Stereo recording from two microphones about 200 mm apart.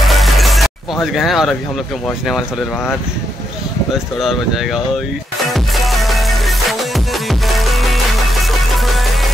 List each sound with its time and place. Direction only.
0.0 s music: centre (ahead or behind)
2.0 s speech: centre (ahead or behind)
4.2 s speech: centre (ahead or behind)
5.5 s music: centre (ahead or behind)